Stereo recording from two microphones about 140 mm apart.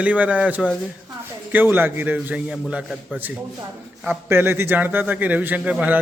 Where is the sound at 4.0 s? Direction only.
15° right (ahead or behind).